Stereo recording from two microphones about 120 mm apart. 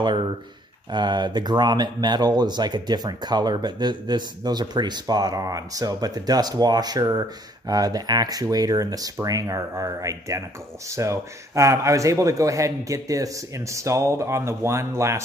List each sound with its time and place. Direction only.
0.9 s a man's voice: 40° right (ahead or behind)